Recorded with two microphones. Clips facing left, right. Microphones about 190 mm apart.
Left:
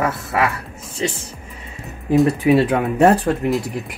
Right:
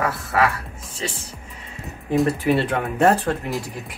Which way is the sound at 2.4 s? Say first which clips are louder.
Left 5 dB; 15° left (ahead or behind).